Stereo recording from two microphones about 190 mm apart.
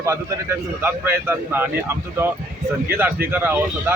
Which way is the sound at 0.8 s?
10° right (ahead or behind).